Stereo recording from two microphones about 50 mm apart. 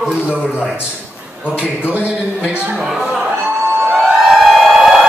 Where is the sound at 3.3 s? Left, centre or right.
Right.